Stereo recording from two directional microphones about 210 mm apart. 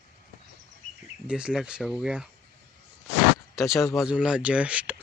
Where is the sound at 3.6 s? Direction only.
Centre (ahead or behind).